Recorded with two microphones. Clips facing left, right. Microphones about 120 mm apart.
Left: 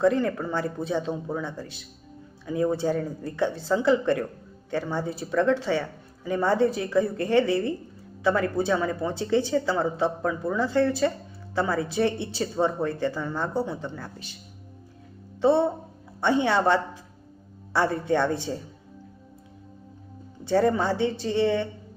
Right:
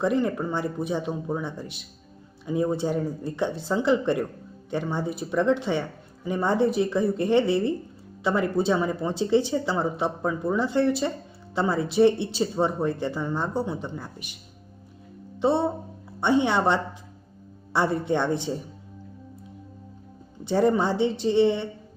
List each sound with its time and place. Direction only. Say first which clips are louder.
0.0 s speech: left 1 dB; 15° right (ahead or behind)
15.4 s speech: left 2 dB; 20° right (ahead or behind)
20.4 s speech: right 1 dB; 20° right (ahead or behind)